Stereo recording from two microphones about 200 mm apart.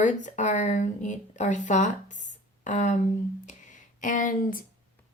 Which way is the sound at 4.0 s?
40° left (ahead or behind).